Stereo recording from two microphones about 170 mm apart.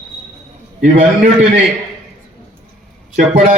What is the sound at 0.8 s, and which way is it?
Speech, 45° right (ahead or behind).